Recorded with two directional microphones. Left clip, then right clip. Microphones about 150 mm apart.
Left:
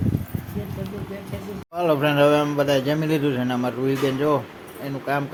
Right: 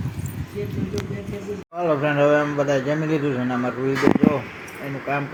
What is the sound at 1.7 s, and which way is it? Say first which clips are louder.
Speech: left 1 dB; 20° left (ahead or behind).